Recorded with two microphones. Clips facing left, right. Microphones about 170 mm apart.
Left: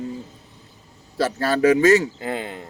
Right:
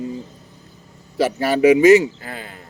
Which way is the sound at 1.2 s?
15° right (ahead or behind).